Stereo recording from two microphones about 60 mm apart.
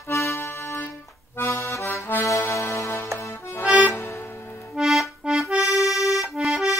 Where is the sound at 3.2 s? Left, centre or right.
Left.